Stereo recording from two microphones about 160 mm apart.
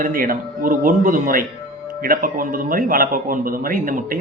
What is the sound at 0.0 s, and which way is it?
A man's voice, 60° right (ahead or behind).